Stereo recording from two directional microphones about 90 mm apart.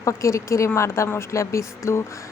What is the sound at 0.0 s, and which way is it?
Speech, 35° left (ahead or behind).